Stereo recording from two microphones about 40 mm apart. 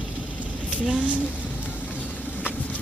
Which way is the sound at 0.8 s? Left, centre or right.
Right.